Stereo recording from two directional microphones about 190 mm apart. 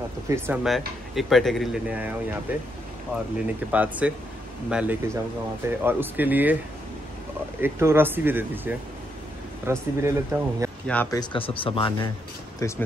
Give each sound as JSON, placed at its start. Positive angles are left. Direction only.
{"t": 0.3, "sound": "speech", "side_deg": -15}
{"t": 0.7, "sound": "speech", "side_deg": 0}
{"t": 3.7, "sound": "speech", "side_deg": -10}
{"t": 7.6, "sound": "speech", "side_deg": -10}
{"t": 10.9, "sound": "speech", "side_deg": 10}
{"t": 11.1, "sound": "speech", "side_deg": 30}
{"t": 12.5, "sound": "speech", "side_deg": 15}